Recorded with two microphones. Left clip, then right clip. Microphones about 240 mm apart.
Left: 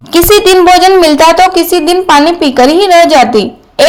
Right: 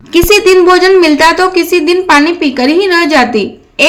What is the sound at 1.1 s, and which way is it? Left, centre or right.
A woman's voice, centre.